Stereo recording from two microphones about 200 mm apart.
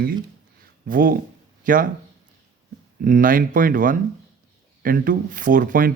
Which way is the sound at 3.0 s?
45° right (ahead or behind).